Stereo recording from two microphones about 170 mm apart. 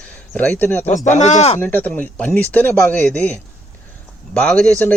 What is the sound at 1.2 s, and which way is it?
Speech, 40° left (ahead or behind).